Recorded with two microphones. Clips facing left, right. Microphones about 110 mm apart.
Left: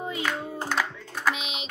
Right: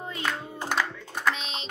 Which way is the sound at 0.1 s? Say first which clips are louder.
Right 1 dB; 5° left (ahead or behind).